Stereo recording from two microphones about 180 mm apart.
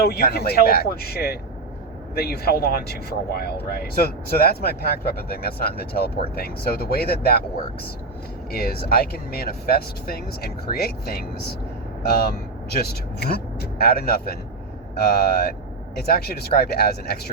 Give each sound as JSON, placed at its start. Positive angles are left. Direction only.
{"t": 0.0, "sound": "speech", "side_deg": 60}
{"t": 8.5, "sound": "speech", "side_deg": 60}